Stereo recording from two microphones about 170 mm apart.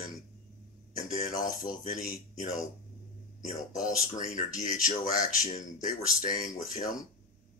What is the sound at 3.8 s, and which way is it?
Speech, 50° left (ahead or behind).